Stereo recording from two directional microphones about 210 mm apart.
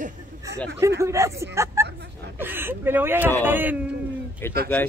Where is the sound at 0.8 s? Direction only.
15° right (ahead or behind).